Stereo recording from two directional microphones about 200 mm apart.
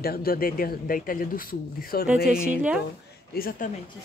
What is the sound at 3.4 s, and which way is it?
Speech, 45° left (ahead or behind).